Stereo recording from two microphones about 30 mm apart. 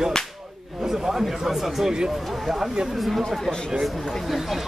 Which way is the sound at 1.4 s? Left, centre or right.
Centre.